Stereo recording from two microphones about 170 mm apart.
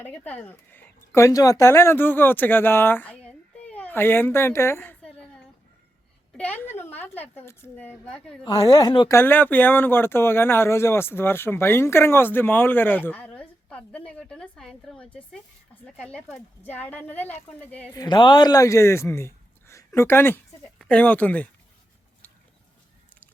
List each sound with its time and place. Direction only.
0.0 s speech: 10° left (ahead or behind)
6.3 s a woman's voice: 10° left (ahead or behind)
8.4 s speech: 20° left (ahead or behind)
9.1 s speech: 10° left (ahead or behind)
17.9 s a man's voice: 25° left (ahead or behind)